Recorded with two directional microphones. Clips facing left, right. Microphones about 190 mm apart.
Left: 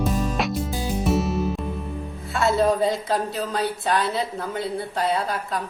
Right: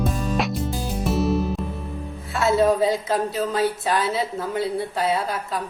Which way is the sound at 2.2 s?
Centre (ahead or behind).